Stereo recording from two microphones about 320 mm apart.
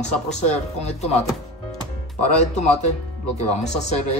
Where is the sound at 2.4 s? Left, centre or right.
Left.